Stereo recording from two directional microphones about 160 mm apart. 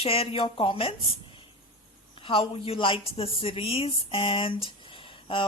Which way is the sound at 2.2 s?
35° left (ahead or behind).